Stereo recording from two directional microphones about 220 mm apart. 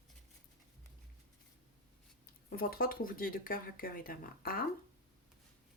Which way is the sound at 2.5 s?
40° left (ahead or behind).